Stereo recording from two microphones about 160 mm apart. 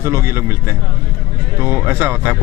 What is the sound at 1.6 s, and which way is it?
Speech, 15° right (ahead or behind).